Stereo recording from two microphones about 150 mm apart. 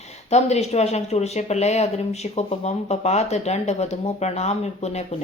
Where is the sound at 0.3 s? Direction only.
45° left (ahead or behind).